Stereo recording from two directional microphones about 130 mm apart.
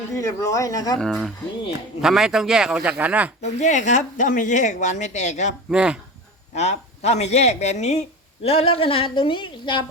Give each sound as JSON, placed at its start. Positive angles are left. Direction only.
{"t": 0.1, "sound": "speech", "side_deg": 25}
{"t": 0.9, "sound": "a man's voice", "side_deg": 5}
{"t": 3.4, "sound": "speech", "side_deg": 70}
{"t": 5.7, "sound": "speech", "side_deg": -5}
{"t": 6.5, "sound": "speech", "side_deg": 55}
{"t": 8.4, "sound": "a woman's voice", "side_deg": 50}